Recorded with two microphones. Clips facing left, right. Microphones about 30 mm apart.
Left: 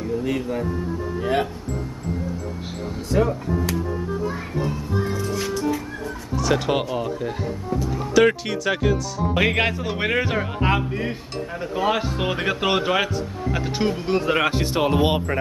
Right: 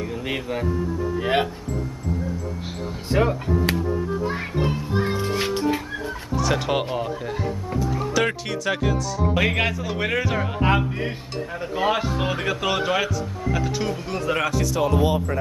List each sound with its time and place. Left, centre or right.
0.0 s speech: right
3.1 s speech: right
4.3 s music: right
6.3 s speech: centre
10.4 s speech: centre
12.4 s speech: left
14.5 s speech: left